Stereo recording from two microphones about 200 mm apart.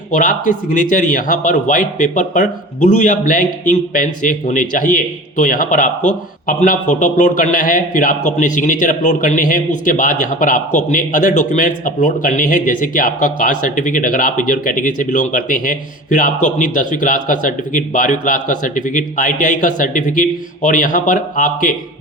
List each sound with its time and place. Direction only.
0.1 s speech: 40° left (ahead or behind)